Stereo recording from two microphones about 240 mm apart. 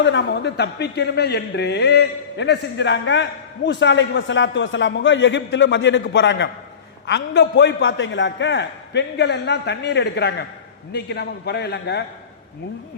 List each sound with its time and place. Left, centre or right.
0.0 s a man's voice: left